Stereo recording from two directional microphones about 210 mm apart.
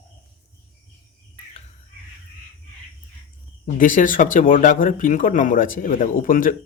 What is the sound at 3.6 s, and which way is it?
Speech, 40° left (ahead or behind).